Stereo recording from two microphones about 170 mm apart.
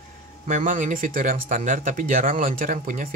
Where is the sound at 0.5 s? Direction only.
50° right (ahead or behind).